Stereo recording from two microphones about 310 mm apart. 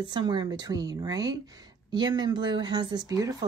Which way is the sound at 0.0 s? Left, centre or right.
Centre.